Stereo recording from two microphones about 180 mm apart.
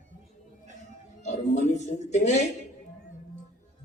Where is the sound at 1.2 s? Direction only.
40° left (ahead or behind).